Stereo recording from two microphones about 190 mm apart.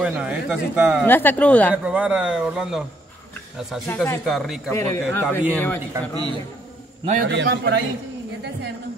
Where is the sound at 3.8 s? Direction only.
15° left (ahead or behind).